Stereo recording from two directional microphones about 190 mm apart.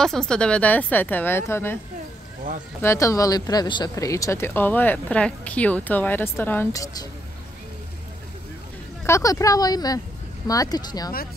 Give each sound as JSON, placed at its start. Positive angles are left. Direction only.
{"t": 0.0, "sound": "speech", "side_deg": 5}
{"t": 2.8, "sound": "speech", "side_deg": 15}
{"t": 9.0, "sound": "speech", "side_deg": 15}